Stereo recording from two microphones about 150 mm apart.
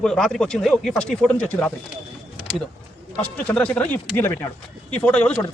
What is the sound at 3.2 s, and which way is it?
A man's voice, 10° left (ahead or behind).